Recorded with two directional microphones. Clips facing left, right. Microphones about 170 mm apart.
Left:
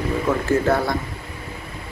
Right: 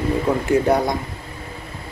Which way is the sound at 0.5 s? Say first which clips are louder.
Right 3 dB; 15° right (ahead or behind).